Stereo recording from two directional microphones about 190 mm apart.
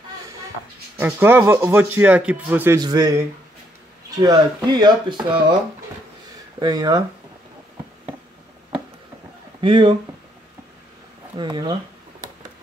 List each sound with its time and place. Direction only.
0.9 s speech: 10° right (ahead or behind)
2.8 s speech: 20° right (ahead or behind)
6.6 s speech: 20° right (ahead or behind)
9.6 s speech: 25° right (ahead or behind)
11.3 s speech: 20° right (ahead or behind)